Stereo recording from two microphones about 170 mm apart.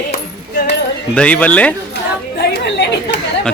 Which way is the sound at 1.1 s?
5° left (ahead or behind).